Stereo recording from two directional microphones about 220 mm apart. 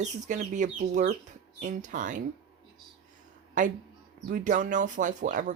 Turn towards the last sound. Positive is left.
turn(degrees=-35)  # may be behind; listen again after turning